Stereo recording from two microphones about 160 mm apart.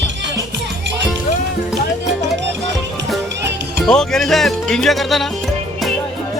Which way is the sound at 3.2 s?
90° right.